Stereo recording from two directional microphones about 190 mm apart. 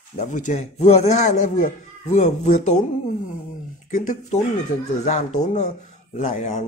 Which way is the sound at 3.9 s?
40° left (ahead or behind).